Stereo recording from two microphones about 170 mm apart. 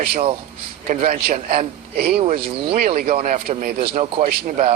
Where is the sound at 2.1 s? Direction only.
35° right (ahead or behind).